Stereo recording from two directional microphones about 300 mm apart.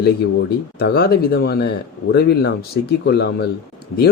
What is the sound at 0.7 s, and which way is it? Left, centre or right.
Speech, left.